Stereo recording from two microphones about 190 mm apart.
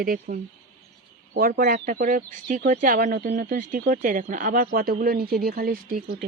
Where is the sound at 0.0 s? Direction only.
50° right (ahead or behind).